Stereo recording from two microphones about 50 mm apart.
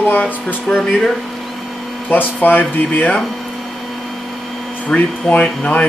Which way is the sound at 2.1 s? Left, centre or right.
Left.